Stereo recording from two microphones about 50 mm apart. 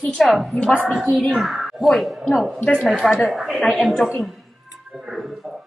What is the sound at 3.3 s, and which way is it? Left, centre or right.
A woman's voice, centre.